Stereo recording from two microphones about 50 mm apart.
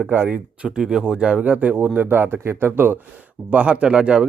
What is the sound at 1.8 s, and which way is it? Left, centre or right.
Speech, right.